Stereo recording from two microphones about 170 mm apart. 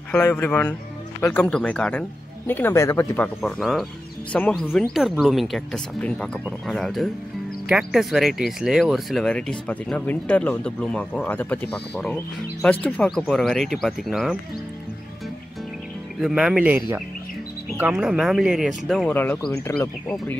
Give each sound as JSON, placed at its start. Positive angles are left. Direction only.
{"t": 0.2, "sound": "speech", "side_deg": 10}
{"t": 3.3, "sound": "speech", "side_deg": 5}
{"t": 4.9, "sound": "speech", "side_deg": 0}
{"t": 16.2, "sound": "speech", "side_deg": -5}
{"t": 19.1, "sound": "speech", "side_deg": 10}